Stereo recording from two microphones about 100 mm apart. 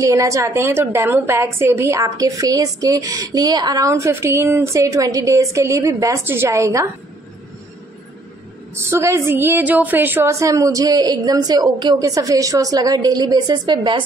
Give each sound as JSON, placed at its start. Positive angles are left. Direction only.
{"t": 0.0, "sound": "a woman's voice", "side_deg": -30}
{"t": 8.7, "sound": "a woman's voice", "side_deg": -25}
{"t": 10.4, "sound": "a woman's voice", "side_deg": -35}